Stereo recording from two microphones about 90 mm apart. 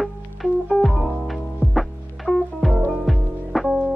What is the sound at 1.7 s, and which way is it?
Music, centre (ahead or behind).